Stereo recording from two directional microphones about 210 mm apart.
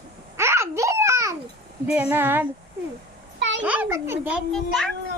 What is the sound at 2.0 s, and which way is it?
Speech, 10° right (ahead or behind).